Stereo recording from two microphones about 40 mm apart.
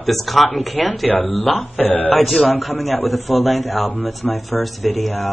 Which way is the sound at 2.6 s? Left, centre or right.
Centre.